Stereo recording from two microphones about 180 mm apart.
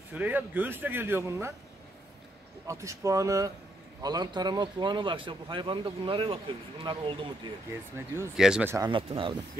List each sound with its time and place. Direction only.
0.1 s a man's voice: 10° right (ahead or behind)
2.6 s a man's voice: 15° right (ahead or behind)
8.0 s a man's voice: 15° right (ahead or behind)
8.7 s speech: 25° right (ahead or behind)